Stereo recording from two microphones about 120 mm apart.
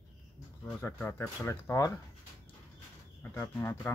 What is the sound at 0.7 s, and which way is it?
Speech, 15° left (ahead or behind).